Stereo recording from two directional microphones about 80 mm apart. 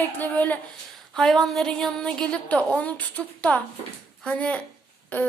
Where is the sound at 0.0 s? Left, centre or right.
Left.